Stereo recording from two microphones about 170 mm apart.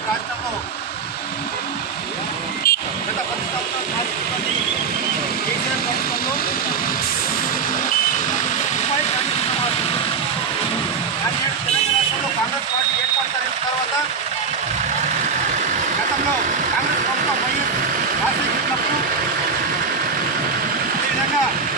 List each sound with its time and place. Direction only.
2.6 s vehicle: 65° left (ahead or behind)